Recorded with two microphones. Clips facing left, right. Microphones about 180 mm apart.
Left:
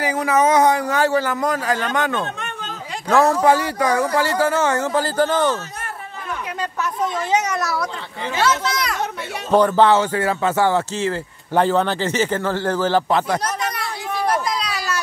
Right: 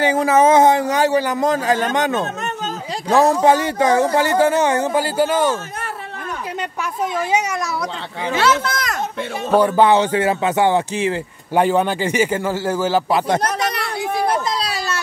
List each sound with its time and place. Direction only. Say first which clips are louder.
0.0 s a man's voice: right 4 dB; 25° right (ahead or behind)
3.1 s speech: right 1 dB; 15° right (ahead or behind)
6.8 s speech: right 1 dB; 10° right (ahead or behind)
8.7 s children playing: even; 45° right (ahead or behind)
9.5 s speech: right 1 dB; 10° right (ahead or behind)
13.4 s a sound: right 4 dB; 75° right (ahead or behind)
14.2 s a sound: left 1 dB; 30° right (ahead or behind)